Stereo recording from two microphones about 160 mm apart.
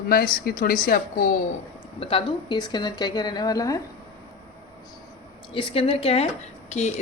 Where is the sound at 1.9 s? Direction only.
35° left (ahead or behind).